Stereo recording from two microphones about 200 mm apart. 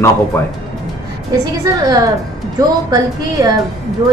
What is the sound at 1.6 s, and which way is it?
A woman's voice, 15° right (ahead or behind).